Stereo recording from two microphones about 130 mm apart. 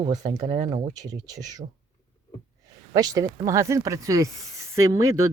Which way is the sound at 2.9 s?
30° right (ahead or behind).